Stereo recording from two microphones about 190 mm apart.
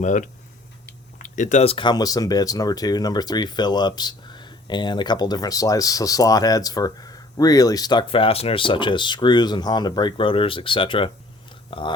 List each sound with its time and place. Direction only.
0.0 s speech: 40° left (ahead or behind)